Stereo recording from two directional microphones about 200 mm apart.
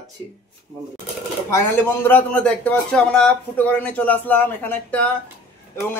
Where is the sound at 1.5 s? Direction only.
10° left (ahead or behind).